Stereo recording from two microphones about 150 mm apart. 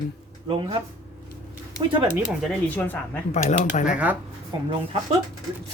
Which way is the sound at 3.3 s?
55° left (ahead or behind).